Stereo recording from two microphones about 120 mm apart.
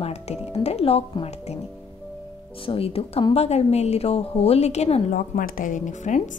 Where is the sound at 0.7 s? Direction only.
55° left (ahead or behind).